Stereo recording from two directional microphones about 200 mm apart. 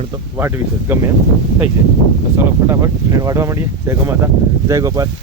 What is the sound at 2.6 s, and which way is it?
Speech, 15° right (ahead or behind).